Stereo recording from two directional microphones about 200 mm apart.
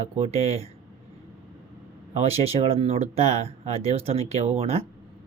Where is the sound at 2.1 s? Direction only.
30° right (ahead or behind).